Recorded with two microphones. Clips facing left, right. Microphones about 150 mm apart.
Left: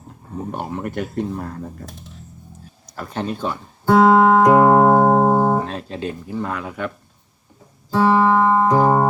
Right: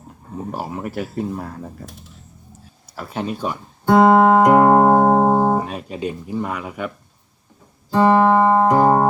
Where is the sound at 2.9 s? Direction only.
5° right (ahead or behind).